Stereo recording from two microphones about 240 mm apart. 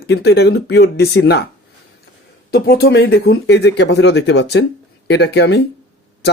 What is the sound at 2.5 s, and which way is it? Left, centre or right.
Speech, left.